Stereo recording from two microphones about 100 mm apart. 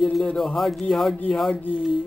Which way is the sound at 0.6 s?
Centre (ahead or behind).